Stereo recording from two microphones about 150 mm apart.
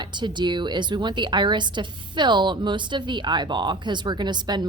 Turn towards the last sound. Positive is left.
turn(degrees=-30)  # may be behind; listen again after turning